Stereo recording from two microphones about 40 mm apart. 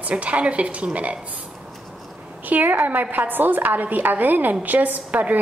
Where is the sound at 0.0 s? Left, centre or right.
Right.